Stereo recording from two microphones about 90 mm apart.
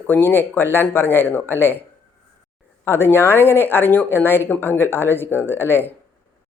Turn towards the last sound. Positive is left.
turn(degrees=25)  # may be behind; listen again after turning